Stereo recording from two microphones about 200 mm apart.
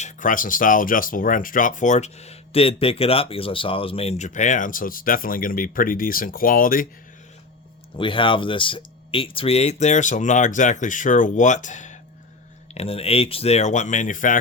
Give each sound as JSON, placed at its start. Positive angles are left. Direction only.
{"t": 0.0, "sound": "speech", "side_deg": 40}
{"t": 7.9, "sound": "speech", "side_deg": 25}